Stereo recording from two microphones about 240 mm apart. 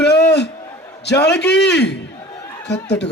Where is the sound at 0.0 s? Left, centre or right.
Left.